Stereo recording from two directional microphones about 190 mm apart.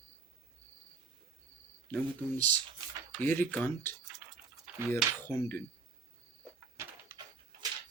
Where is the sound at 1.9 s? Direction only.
10° left (ahead or behind).